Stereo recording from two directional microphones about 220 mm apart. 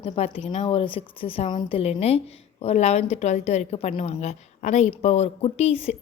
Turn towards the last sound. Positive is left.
turn(degrees=25)  # may be behind; listen again after turning